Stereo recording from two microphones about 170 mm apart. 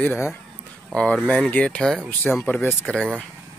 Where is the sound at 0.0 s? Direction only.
10° left (ahead or behind).